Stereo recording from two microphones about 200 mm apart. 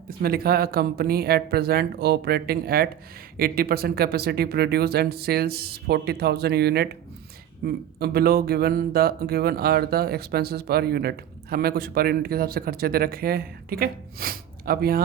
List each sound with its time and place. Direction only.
0.2 s speech: 50° right (ahead or behind)